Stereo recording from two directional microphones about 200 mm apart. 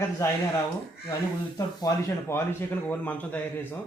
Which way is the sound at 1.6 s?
15° left (ahead or behind).